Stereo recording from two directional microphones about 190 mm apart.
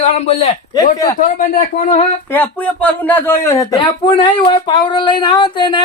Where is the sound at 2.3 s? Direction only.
10° left (ahead or behind).